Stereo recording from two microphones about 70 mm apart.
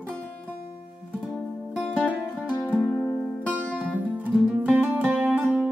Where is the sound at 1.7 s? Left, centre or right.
Centre.